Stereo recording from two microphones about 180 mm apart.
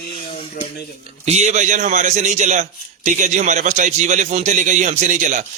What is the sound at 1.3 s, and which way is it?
A man's voice, 40° right (ahead or behind).